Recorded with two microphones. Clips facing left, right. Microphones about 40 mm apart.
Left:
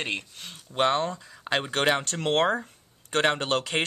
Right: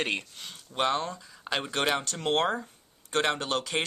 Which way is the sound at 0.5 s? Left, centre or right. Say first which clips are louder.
Left 4 dB; left.